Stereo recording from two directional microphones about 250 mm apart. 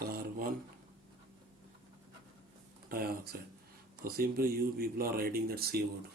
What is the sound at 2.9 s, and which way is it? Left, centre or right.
Speech, right.